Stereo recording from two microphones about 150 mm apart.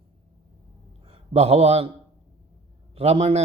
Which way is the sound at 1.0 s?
45° right (ahead or behind).